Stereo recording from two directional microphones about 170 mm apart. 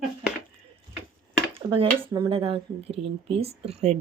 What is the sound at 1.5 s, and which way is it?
Speech, 30° right (ahead or behind).